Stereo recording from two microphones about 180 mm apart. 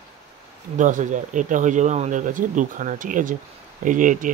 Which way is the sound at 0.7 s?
45° right (ahead or behind).